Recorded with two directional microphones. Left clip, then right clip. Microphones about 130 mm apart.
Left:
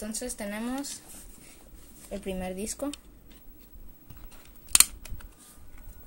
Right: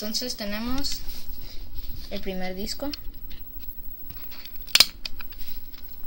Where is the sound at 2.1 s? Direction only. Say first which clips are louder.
Right 2 dB; 55° left (ahead or behind).